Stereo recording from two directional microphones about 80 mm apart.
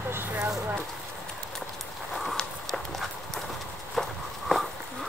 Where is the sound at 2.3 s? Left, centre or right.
Centre.